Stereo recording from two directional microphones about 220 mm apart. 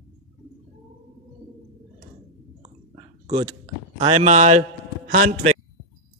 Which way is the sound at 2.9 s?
20° right (ahead or behind).